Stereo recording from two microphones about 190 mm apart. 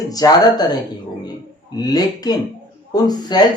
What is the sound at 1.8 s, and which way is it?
Speech, 20° left (ahead or behind).